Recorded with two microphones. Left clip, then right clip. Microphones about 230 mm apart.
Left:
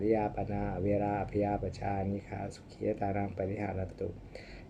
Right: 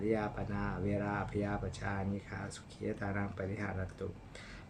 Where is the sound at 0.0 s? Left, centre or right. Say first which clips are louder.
Left 5 dB; centre.